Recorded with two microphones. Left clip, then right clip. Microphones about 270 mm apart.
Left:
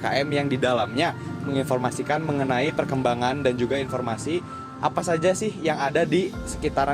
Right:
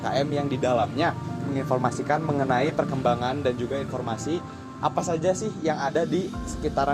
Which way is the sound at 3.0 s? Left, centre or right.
Left.